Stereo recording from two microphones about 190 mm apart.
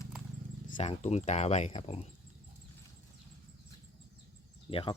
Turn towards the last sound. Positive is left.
turn(degrees=30)  # may be behind; listen again after turning